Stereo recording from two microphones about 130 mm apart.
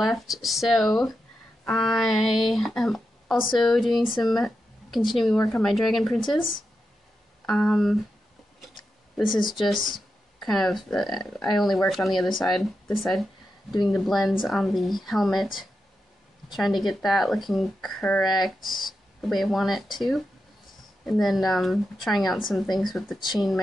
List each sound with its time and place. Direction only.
0.0 s speech: centre (ahead or behind)
7.4 s speech: 5° left (ahead or behind)
9.5 s speech: centre (ahead or behind)
9.8 s speech: 90° left
10.4 s speech: centre (ahead or behind)